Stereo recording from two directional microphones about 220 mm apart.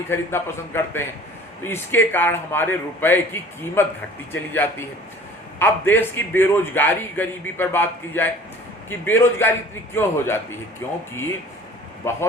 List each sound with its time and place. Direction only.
0.1 s a man's voice: 10° left (ahead or behind)
12.0 s a man's voice: 10° left (ahead or behind)